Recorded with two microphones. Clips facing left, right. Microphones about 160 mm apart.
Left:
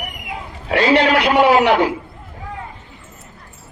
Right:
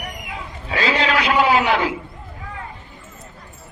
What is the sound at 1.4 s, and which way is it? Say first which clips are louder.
Speech: left 6 dB; 70° left (ahead or behind).